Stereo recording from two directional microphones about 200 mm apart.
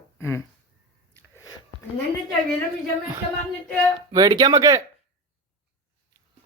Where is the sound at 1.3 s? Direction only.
15° left (ahead or behind).